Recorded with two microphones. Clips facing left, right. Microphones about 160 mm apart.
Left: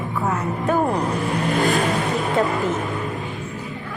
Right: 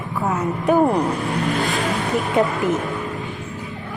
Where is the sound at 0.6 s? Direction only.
15° right (ahead or behind).